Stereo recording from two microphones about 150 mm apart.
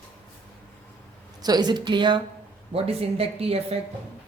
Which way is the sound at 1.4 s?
25° right (ahead or behind).